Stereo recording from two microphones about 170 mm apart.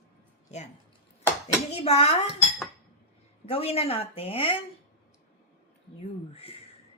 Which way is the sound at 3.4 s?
35° left (ahead or behind).